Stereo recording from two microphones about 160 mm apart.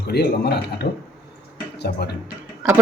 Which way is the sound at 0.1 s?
90° left.